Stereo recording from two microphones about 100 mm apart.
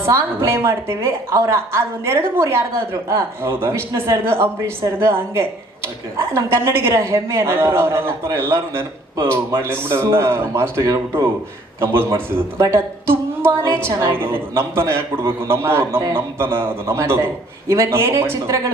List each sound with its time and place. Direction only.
0.0 s a woman's voice: 25° right (ahead or behind)